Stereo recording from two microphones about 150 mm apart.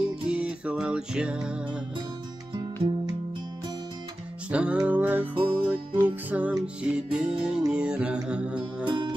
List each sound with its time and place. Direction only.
0.0 s music: 5° right (ahead or behind)
4.5 s music: 10° right (ahead or behind)
8.8 s music: 30° right (ahead or behind)